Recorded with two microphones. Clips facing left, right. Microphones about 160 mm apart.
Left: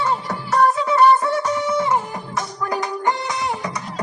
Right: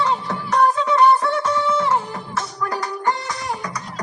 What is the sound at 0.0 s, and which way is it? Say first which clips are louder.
Music: right 1 dB; 5° left (ahead or behind).